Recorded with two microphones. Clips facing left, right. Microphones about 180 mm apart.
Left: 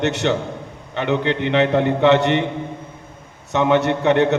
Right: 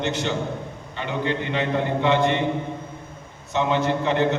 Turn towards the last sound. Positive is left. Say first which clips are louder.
# left 5 dB
turn(degrees=70)  # may be behind; listen again after turning